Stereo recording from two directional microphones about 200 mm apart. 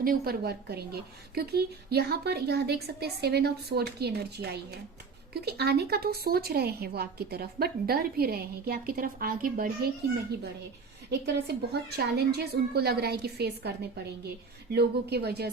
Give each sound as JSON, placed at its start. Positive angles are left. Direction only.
{"t": 0.0, "sound": "a woman's voice", "side_deg": -50}
{"t": 11.4, "sound": "a woman's voice", "side_deg": -55}